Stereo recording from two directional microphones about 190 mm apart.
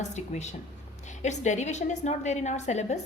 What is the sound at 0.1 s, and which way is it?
A woman's voice, 35° left (ahead or behind).